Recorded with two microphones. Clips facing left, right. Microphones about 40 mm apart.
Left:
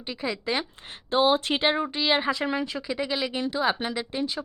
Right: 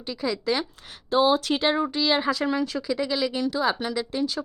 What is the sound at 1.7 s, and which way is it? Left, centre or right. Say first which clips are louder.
A woman's voice: right 1 dB; centre.